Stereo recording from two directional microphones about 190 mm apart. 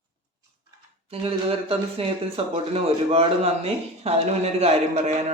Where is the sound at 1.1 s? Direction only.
30° right (ahead or behind).